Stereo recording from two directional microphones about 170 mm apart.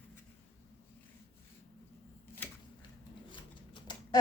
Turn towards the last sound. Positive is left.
turn(degrees=25)  # may be behind; listen again after turning